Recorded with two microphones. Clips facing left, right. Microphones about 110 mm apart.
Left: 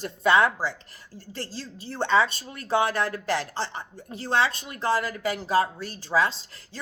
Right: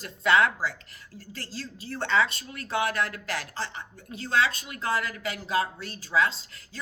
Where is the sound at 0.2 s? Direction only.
25° left (ahead or behind).